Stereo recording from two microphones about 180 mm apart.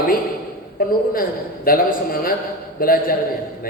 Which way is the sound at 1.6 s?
55° left (ahead or behind).